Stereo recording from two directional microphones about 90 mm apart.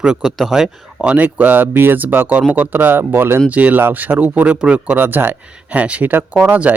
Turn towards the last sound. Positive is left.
turn(degrees=-25)  # may be behind; listen again after turning